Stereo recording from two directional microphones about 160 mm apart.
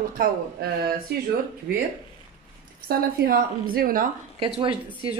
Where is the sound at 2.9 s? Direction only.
70° right (ahead or behind).